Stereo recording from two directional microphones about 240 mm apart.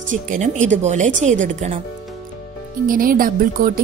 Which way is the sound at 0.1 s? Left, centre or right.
Right.